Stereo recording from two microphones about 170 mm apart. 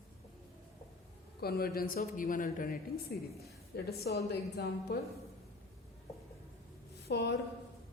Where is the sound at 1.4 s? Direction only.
65° left (ahead or behind).